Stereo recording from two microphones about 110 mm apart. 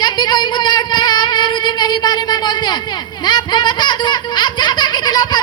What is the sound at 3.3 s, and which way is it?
Baby laughter, 40° left (ahead or behind).